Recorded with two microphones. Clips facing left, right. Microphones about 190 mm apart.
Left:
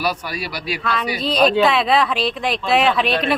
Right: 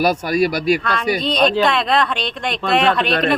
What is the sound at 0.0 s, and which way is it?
Speech, 45° right (ahead or behind).